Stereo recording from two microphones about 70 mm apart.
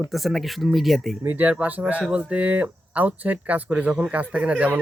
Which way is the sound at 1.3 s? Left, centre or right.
Right.